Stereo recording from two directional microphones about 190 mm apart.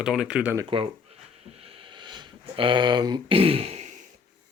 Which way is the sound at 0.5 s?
25° right (ahead or behind).